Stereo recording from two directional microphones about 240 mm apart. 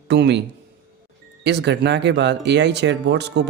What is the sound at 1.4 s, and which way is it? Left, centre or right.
Speech, right.